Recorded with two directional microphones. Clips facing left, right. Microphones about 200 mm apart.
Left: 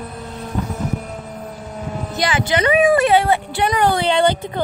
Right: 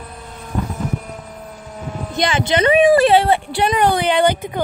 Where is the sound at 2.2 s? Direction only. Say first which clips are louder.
Right 2 dB; 25° right (ahead or behind).